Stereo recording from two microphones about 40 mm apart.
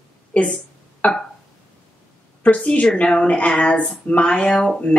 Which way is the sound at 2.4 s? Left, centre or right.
Left.